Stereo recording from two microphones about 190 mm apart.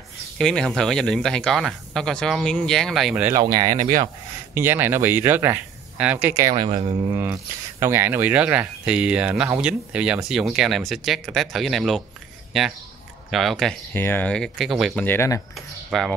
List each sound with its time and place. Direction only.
0.4 s speech: centre (ahead or behind)
3.3 s speech: 20° right (ahead or behind)
6.5 s speech: 25° right (ahead or behind)
7.1 s speech: 10° right (ahead or behind)
15.0 s speech: 15° left (ahead or behind)
15.5 s speech: centre (ahead or behind)